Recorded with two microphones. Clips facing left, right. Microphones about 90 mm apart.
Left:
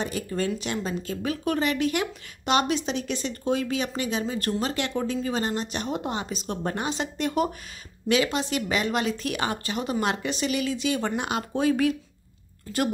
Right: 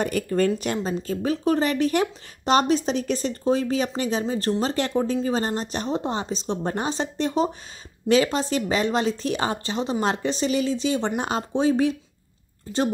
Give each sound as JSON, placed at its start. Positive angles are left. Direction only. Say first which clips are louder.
{"t": 0.0, "sound": "a woman's voice", "louder": "right 6 dB", "side_deg": -50}
{"t": 0.8, "sound": "speech", "louder": "right 4 dB", "side_deg": -35}